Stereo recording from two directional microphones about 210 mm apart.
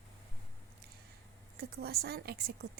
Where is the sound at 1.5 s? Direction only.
50° right (ahead or behind).